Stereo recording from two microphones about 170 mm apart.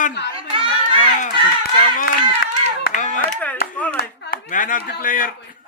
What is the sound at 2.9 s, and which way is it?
Clapping, 50° left (ahead or behind).